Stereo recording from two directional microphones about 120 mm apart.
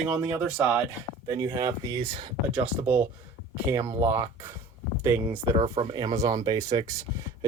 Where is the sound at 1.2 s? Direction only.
25° right (ahead or behind).